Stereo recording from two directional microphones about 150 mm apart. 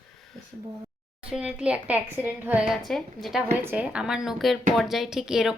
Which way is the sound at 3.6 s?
10° right (ahead or behind).